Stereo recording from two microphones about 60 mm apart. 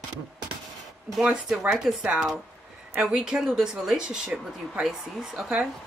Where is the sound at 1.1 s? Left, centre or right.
Centre.